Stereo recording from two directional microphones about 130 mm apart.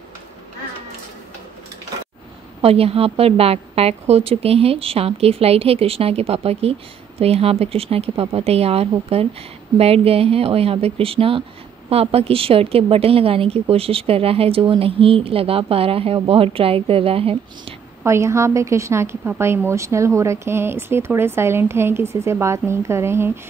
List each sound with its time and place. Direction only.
2.6 s a woman's voice: 50° right (ahead or behind)
18.0 s a woman's voice: 20° right (ahead or behind)